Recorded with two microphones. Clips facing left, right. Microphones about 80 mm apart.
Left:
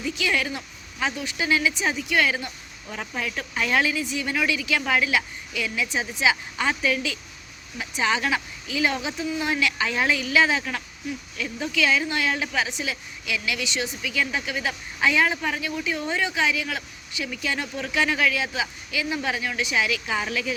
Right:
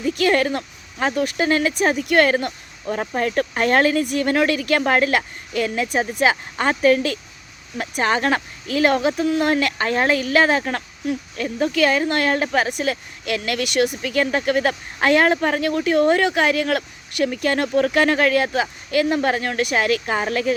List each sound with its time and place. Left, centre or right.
0.1 s speech: right
14.0 s speech: right
17.3 s speech: right